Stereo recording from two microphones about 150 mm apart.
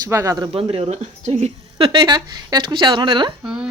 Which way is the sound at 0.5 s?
40° right (ahead or behind).